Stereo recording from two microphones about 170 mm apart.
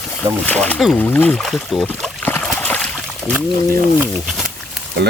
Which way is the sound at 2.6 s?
10° left (ahead or behind).